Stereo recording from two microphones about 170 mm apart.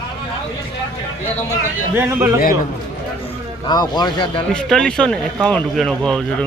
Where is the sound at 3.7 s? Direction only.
25° left (ahead or behind).